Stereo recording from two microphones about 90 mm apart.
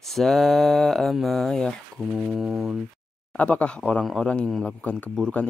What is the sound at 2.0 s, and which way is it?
Speech, 15° right (ahead or behind).